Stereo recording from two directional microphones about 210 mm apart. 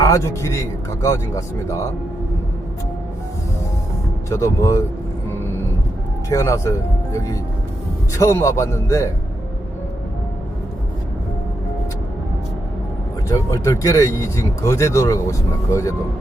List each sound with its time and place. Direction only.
0.0 s a man's voice: 15° left (ahead or behind)
4.3 s speech: 15° left (ahead or behind)
6.3 s speech: 15° left (ahead or behind)
13.2 s speech: 15° left (ahead or behind)